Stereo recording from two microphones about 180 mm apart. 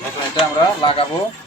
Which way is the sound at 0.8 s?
30° left (ahead or behind).